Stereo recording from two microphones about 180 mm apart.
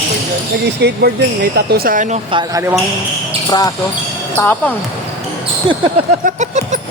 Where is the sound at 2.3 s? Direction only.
20° right (ahead or behind).